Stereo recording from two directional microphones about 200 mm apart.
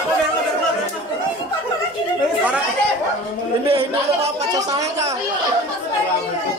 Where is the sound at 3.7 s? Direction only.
30° right (ahead or behind).